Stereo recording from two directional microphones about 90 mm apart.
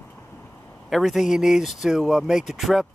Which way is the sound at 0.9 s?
5° right (ahead or behind).